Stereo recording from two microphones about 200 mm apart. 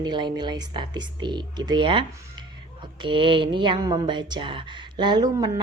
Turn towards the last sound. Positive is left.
turn(degrees=-20)  # may be behind; listen again after turning